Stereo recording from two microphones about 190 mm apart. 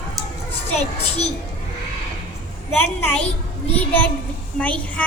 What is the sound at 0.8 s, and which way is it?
Speech, 35° left (ahead or behind).